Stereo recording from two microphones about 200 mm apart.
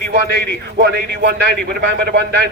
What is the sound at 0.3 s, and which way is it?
A man's voice, 55° right (ahead or behind).